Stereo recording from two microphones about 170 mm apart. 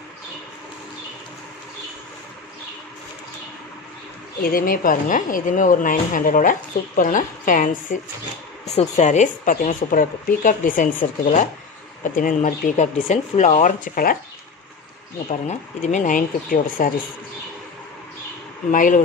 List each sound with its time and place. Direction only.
4.4 s speech: 60° left (ahead or behind)
15.2 s speech: 45° left (ahead or behind)
18.7 s speech: 50° left (ahead or behind)